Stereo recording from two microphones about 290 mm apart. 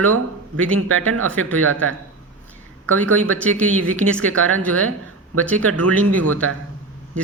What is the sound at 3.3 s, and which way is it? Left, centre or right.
Speech, centre.